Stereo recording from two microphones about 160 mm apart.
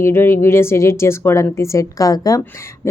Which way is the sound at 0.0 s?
15° left (ahead or behind).